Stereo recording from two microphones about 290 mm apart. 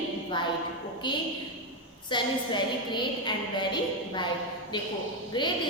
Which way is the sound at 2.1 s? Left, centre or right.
Centre.